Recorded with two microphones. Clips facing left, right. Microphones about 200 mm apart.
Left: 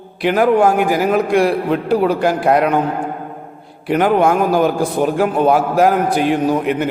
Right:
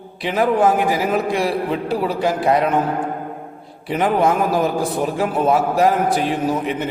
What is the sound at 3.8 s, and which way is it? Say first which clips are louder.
A man's voice: left 4 dB; centre (ahead or behind).